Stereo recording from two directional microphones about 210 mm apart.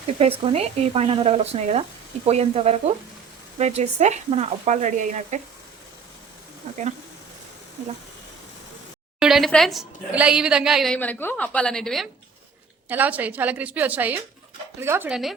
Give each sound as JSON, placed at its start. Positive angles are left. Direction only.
{"t": 0.2, "sound": "speech", "side_deg": -30}
{"t": 6.7, "sound": "speech", "side_deg": -35}
{"t": 9.1, "sound": "a woman's voice", "side_deg": 0}